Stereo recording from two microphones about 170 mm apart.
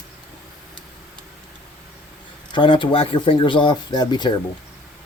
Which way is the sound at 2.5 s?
30° left (ahead or behind).